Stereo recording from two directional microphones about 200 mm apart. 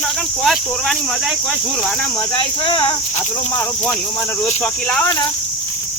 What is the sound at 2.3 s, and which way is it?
Speech, 25° left (ahead or behind).